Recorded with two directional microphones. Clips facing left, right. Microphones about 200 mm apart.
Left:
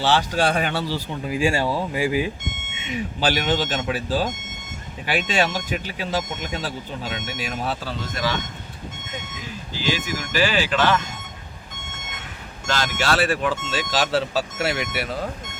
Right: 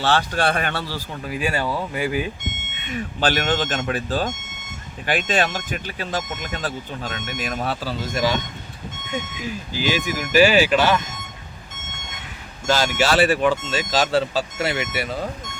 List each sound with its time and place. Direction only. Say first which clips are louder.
0.0 s speech: even; 15° left (ahead or behind)
2.7 s buzzer: left 1 dB; 55° right (ahead or behind)
3.0 s speech: right 1 dB; 10° left (ahead or behind)
5.4 s speech: left 1 dB; 10° left (ahead or behind)
8.1 s speech: right 4 dB; 15° right (ahead or behind)
9.7 s speech: right 2 dB; 15° right (ahead or behind)
12.6 s speech: right 4 dB; 5° right (ahead or behind)